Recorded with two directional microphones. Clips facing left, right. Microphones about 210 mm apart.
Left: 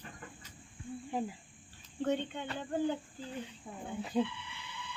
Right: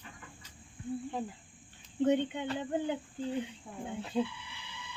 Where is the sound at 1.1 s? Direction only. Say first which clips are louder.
Left 1 dB; 10° left (ahead or behind).